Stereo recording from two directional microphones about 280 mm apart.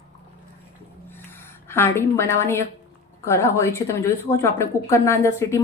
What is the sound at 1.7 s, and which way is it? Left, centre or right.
Speech, centre.